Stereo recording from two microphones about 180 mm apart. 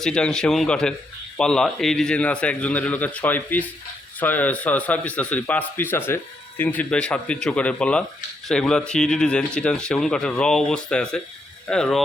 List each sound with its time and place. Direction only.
0.0 s a man's voice: 5° left (ahead or behind)